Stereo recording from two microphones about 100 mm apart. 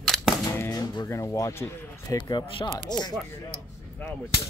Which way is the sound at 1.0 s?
35° left (ahead or behind).